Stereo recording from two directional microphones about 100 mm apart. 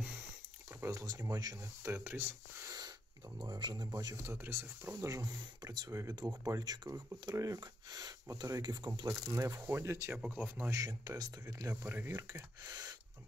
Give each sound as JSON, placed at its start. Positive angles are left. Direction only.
{"t": 0.7, "sound": "speech", "side_deg": -30}
{"t": 1.9, "sound": "speech", "side_deg": -20}
{"t": 3.3, "sound": "speech", "side_deg": -45}
{"t": 9.1, "sound": "speech", "side_deg": -30}
{"t": 10.1, "sound": "speech", "side_deg": -15}
{"t": 10.7, "sound": "speech", "side_deg": -35}
{"t": 11.7, "sound": "speech", "side_deg": -20}